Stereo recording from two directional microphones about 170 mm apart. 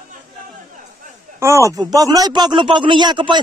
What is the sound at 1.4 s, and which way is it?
Speech, 15° right (ahead or behind).